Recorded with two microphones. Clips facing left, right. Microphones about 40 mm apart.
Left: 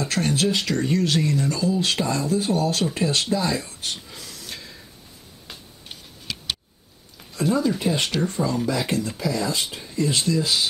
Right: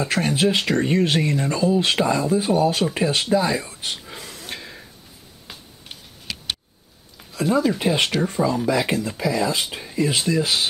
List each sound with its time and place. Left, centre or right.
0.0 s speech: centre
4.0 s a sound: right
5.5 s tick-tock: centre
7.2 s speech: centre
7.9 s speech: right
10.4 s speech: right